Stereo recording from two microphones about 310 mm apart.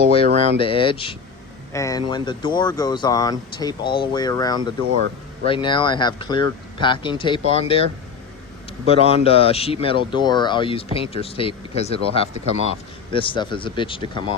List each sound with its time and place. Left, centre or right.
0.3 s a sound: right
0.6 s speech: centre
4.9 s speech: right
5.5 s speech: centre
8.9 s speech: centre